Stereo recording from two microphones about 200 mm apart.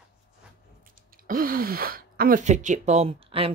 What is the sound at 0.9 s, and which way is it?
Speech, 45° right (ahead or behind).